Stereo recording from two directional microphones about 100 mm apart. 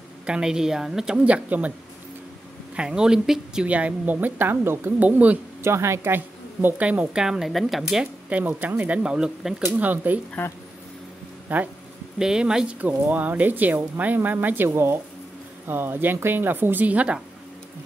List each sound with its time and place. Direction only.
0.3 s speech: 5° right (ahead or behind)
2.7 s speech: 10° right (ahead or behind)
5.6 s speech: 25° right (ahead or behind); by 8.1 s centre (ahead or behind)
8.3 s speech: 15° right (ahead or behind)
9.8 s speech: 15° right (ahead or behind)
11.4 s a woman's voice: 15° right (ahead or behind)